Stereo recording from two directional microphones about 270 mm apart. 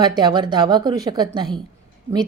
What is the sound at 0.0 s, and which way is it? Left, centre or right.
A woman's voice, centre.